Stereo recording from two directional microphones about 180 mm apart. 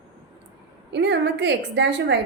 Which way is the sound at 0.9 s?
75° right (ahead or behind).